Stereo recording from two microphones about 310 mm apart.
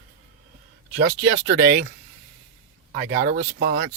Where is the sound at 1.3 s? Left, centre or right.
Right.